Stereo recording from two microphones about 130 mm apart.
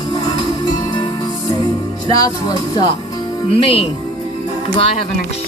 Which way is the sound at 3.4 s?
50° left (ahead or behind).